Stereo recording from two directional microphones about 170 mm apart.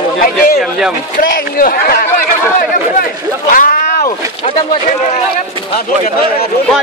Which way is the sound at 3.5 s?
55° left (ahead or behind).